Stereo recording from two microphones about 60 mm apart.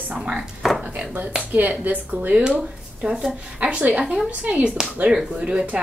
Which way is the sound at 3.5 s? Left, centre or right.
Right.